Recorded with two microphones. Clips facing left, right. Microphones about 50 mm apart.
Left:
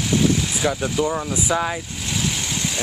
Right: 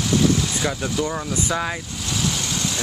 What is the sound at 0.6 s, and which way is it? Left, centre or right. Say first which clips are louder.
Speech: left 5 dB; centre.